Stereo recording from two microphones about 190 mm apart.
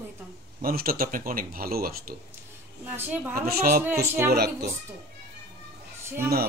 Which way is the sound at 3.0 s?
10° right (ahead or behind).